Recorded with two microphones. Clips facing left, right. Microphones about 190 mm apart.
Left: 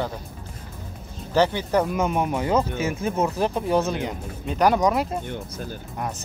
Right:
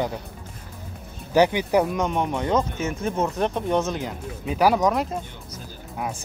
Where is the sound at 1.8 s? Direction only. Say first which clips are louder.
Left 1 dB; 5° left (ahead or behind).